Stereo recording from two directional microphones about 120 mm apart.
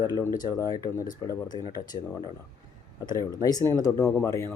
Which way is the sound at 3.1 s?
30° left (ahead or behind).